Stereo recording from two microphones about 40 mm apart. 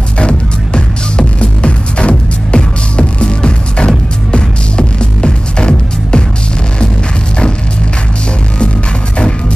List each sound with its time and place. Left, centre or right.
0.2 s music: left